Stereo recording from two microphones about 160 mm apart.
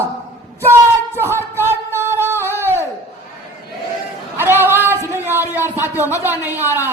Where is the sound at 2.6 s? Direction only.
15° right (ahead or behind).